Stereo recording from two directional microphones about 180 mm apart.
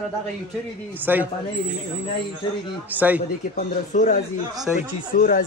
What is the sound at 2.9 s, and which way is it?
Speech, 10° right (ahead or behind).